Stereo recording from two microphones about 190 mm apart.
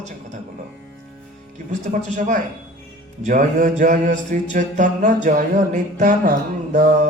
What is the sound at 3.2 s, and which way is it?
Mantra, 45° right (ahead or behind).